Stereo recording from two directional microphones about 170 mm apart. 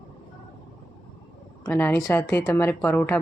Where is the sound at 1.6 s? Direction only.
10° left (ahead or behind).